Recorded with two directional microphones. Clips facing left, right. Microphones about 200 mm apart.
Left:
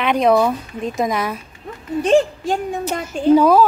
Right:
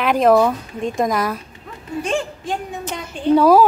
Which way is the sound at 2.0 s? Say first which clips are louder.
Left 9 dB; 40° left (ahead or behind).